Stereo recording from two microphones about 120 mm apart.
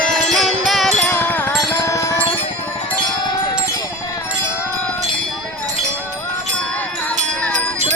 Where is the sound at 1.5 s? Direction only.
25° left (ahead or behind).